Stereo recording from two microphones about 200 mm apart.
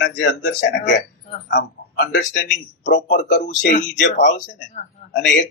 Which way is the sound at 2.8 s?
60° left (ahead or behind).